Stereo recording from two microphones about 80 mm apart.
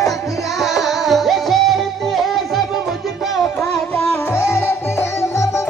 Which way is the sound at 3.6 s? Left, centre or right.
Left.